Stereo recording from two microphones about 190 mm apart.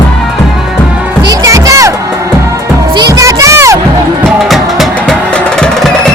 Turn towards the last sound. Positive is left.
turn(degrees=0)  # may be behind; listen again after turning